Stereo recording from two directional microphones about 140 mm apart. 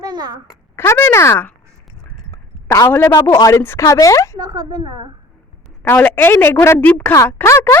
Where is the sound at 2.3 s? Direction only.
20° left (ahead or behind).